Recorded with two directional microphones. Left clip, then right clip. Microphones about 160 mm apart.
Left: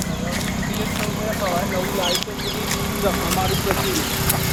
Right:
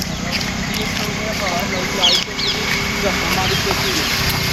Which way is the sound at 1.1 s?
15° left (ahead or behind).